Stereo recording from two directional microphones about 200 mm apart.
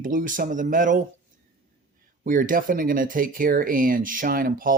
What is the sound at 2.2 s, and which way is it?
Speech, 40° right (ahead or behind).